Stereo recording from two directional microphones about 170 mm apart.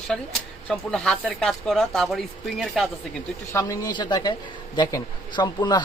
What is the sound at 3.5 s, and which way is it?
Speech, 20° left (ahead or behind).